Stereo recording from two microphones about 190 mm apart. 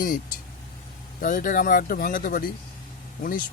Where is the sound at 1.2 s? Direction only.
45° left (ahead or behind).